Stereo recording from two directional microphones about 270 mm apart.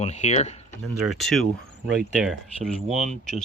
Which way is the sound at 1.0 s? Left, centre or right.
Centre.